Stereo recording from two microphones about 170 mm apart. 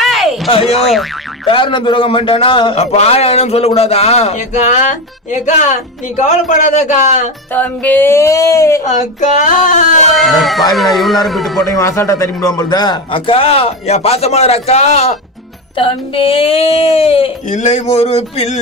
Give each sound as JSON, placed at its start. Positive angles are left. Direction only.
{"t": 0.0, "sound": "a sound", "side_deg": 0}
{"t": 0.7, "sound": "speech", "side_deg": 0}
{"t": 1.5, "sound": "a man's voice", "side_deg": 30}
{"t": 7.5, "sound": "speech", "side_deg": 10}
{"t": 8.8, "sound": "speech", "side_deg": 45}
{"t": 10.1, "sound": "speech", "side_deg": 0}
{"t": 11.6, "sound": "a man's voice", "side_deg": 20}